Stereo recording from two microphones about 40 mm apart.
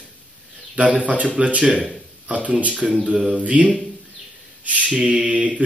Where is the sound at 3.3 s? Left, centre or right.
Right.